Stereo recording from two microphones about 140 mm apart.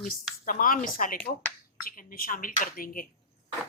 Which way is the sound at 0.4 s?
80° left.